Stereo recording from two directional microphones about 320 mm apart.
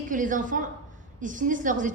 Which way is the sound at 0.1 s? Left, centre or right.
Right.